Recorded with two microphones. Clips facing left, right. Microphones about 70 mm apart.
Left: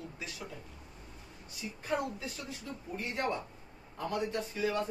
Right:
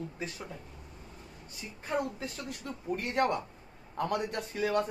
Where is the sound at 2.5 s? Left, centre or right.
Right.